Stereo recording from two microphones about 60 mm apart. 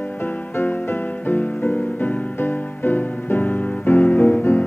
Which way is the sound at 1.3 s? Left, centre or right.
Left.